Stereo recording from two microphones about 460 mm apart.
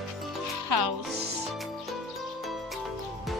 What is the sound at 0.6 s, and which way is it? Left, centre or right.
Speech, right.